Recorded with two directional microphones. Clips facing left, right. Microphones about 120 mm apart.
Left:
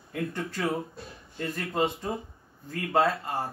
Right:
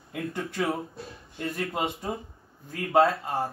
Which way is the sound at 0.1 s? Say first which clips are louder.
Even; 15° right (ahead or behind).